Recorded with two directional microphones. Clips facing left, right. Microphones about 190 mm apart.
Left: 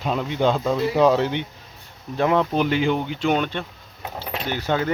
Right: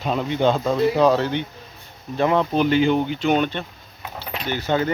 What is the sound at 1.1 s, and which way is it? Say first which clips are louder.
Speech: even; 15° left (ahead or behind).